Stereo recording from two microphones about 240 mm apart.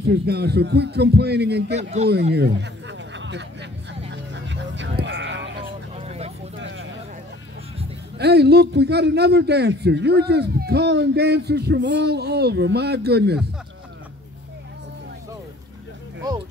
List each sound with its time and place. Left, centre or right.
0.3 s a man's voice: right
1.8 s speech: right
2.3 s a sound: right
4.1 s vehicle: right
5.9 s vehicle: right
8.2 s a man's voice: right